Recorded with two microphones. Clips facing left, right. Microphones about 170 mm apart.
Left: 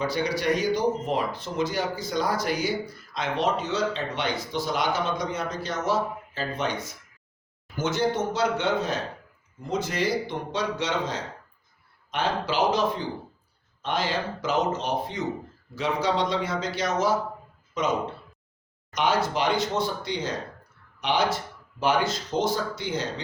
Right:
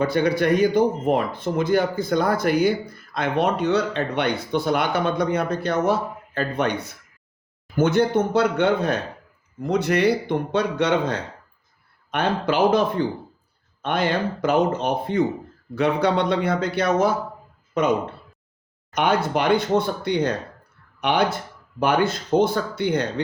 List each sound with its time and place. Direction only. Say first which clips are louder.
0.0 s speech: right 6 dB; 55° right (ahead or behind)